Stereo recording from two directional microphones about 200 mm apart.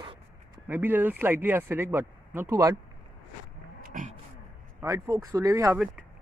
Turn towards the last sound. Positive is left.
turn(degrees=-15)  # may be behind; listen again after turning